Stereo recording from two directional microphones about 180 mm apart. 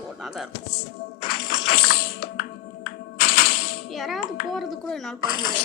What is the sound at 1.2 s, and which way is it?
Music, 55° left (ahead or behind).